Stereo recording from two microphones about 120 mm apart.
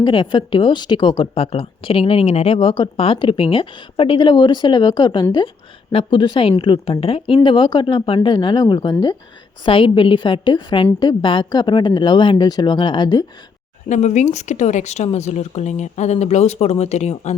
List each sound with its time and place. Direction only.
0.0 s speech: 40° left (ahead or behind)
1.4 s speech: 55° left (ahead or behind); by 13.2 s 35° left (ahead or behind)
13.8 s speech: 90° left; by 17.3 s 70° left (ahead or behind)